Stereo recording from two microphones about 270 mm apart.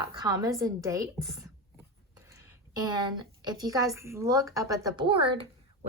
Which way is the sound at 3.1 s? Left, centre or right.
Centre.